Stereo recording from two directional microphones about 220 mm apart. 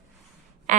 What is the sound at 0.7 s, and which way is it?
Speech, 35° right (ahead or behind).